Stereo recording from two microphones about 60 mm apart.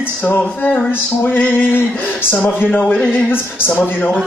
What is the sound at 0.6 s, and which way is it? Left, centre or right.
Speech, left.